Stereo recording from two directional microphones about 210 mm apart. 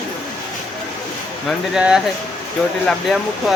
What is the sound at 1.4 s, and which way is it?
Speech, 5° right (ahead or behind).